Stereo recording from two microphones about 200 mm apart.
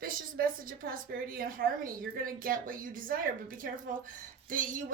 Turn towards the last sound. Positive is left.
turn(degrees=-40)  # may be behind; listen again after turning